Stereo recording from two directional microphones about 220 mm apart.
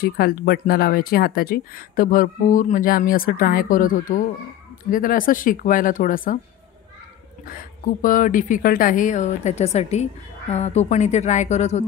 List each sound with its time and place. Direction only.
0.0 s speech: 45° left (ahead or behind)
7.4 s speech: 40° left (ahead or behind)